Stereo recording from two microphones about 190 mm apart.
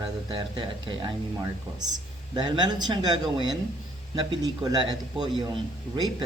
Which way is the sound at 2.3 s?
25° right (ahead or behind).